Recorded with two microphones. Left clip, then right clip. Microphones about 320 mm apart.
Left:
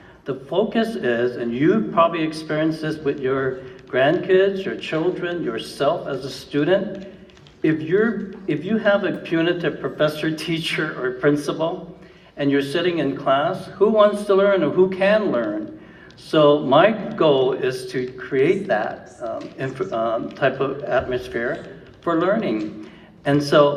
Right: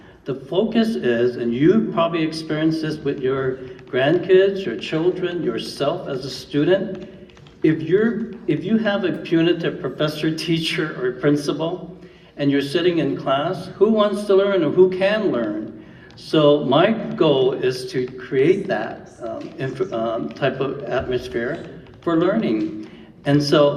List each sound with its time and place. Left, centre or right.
0.3 s a man's voice: centre